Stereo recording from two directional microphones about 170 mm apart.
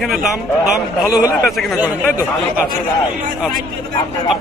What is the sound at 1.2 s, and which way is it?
Speech, 5° right (ahead or behind).